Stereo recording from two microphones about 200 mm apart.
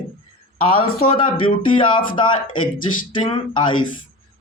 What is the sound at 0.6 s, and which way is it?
Speech, 25° left (ahead or behind).